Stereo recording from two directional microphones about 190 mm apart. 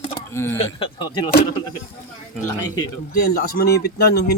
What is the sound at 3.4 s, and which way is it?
Speech, 55° left (ahead or behind).